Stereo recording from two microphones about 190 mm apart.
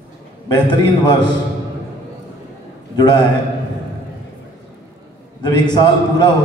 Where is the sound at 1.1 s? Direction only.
25° left (ahead or behind).